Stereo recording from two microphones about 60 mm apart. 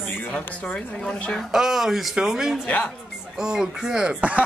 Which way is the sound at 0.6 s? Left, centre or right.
Centre.